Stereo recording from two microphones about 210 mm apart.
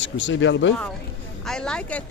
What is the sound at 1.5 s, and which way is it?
Speech, 5° left (ahead or behind).